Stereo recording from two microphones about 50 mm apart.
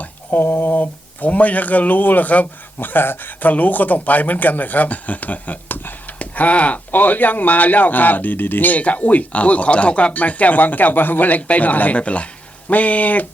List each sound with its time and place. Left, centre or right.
0.0 s speech: left
6.1 s speech: left